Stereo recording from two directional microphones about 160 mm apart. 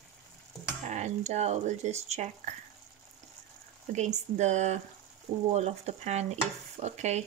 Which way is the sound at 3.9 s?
45° right (ahead or behind).